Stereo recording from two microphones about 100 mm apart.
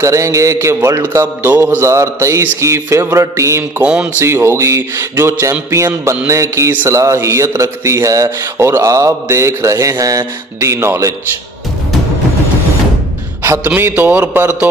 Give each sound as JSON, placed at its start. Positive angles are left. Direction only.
{"t": 0.0, "sound": "a man's voice", "side_deg": -30}
{"t": 3.8, "sound": "speech", "side_deg": -15}
{"t": 4.2, "sound": "a man's voice", "side_deg": -25}
{"t": 13.7, "sound": "a man's voice", "side_deg": -20}